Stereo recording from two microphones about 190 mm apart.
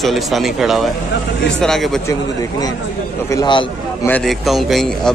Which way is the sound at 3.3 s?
25° left (ahead or behind).